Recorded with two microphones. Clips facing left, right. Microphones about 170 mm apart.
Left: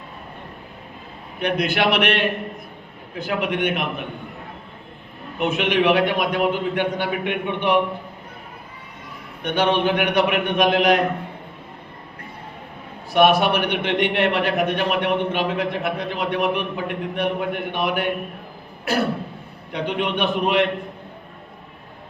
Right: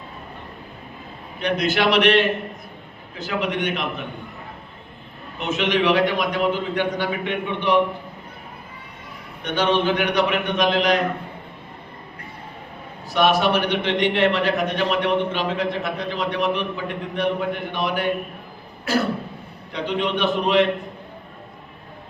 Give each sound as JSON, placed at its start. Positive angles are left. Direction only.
{"t": 1.4, "sound": "a man's voice", "side_deg": 55}
{"t": 5.4, "sound": "a man's voice", "side_deg": 55}
{"t": 9.4, "sound": "a man's voice", "side_deg": 55}
{"t": 13.1, "sound": "a man's voice", "side_deg": 55}
{"t": 19.7, "sound": "a man's voice", "side_deg": 55}